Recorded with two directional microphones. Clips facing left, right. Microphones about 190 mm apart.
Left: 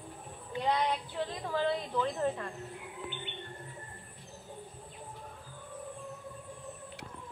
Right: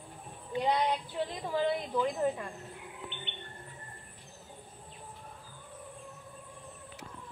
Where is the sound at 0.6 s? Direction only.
15° right (ahead or behind).